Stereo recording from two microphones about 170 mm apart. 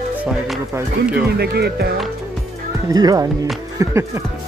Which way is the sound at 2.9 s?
20° right (ahead or behind).